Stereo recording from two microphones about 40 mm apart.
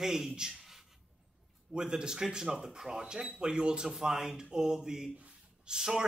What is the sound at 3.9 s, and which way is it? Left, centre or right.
Speech, centre.